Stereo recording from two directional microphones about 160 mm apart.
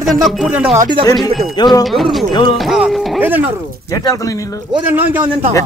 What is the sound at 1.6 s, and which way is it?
Speech, 30° left (ahead or behind).